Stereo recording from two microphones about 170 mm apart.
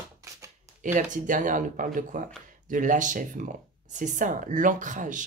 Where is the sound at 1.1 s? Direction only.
50° right (ahead or behind).